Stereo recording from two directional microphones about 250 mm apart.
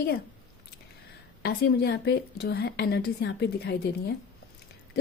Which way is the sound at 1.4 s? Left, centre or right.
Left.